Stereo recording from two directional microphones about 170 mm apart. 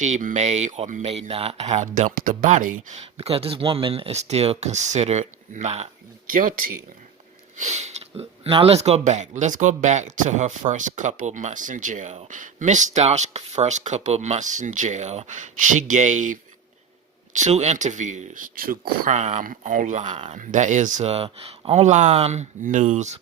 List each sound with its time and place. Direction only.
0.0 s speech: 45° right (ahead or behind)
7.5 s speech: 40° right (ahead or behind)